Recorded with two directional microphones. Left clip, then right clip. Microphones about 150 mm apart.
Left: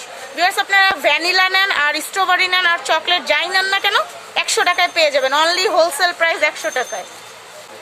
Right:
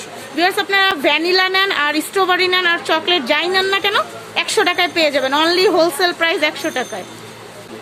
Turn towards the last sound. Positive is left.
turn(degrees=10)  # may be behind; listen again after turning